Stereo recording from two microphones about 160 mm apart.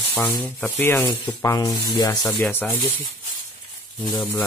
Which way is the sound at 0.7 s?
15° left (ahead or behind).